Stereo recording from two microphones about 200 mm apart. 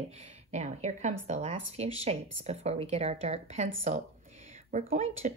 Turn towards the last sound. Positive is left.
turn(degrees=-35)  # may be behind; listen again after turning